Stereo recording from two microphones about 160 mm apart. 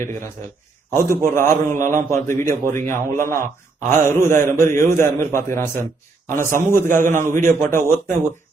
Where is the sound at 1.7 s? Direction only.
55° right (ahead or behind).